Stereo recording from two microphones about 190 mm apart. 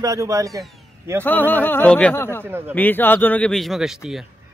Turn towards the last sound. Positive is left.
turn(degrees=-5)  # may be behind; listen again after turning